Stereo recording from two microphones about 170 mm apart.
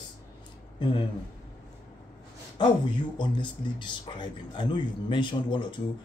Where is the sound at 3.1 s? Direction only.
25° left (ahead or behind).